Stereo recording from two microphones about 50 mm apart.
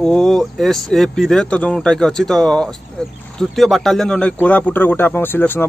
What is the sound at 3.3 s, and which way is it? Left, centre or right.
Speech, centre.